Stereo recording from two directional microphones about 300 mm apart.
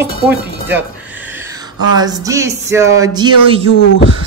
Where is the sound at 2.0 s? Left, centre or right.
Centre.